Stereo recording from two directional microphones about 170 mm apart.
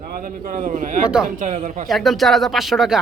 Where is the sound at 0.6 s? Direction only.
50° right (ahead or behind).